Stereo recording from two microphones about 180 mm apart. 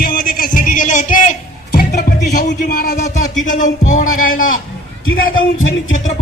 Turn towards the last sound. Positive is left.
turn(degrees=90)